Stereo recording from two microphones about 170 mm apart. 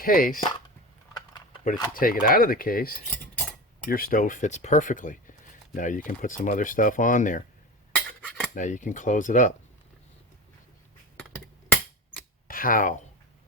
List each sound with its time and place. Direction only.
0.0 s speech: 55° left (ahead or behind)
1.9 s speech: 55° left (ahead or behind)
7.9 s cutlery: 5° left (ahead or behind)
8.5 s speech: 45° left (ahead or behind)
12.5 s speech: 55° left (ahead or behind)